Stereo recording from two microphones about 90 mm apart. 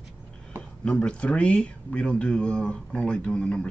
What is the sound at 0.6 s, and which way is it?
Speech, 10° left (ahead or behind).